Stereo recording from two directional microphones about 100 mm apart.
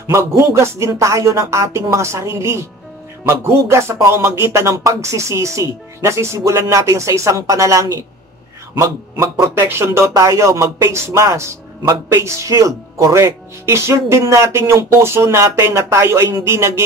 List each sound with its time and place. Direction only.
0.4 s speech: 25° right (ahead or behind)